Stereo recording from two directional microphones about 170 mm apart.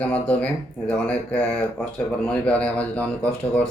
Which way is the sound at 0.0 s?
10° left (ahead or behind).